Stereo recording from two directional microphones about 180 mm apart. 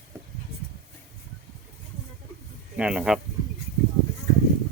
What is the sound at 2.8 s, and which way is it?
Speech, 5° right (ahead or behind).